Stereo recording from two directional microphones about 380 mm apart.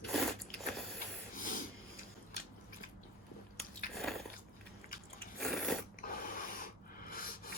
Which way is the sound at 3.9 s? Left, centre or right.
Centre.